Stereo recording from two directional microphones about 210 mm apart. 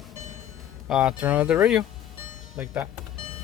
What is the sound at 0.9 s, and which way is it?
Speech, 5° right (ahead or behind).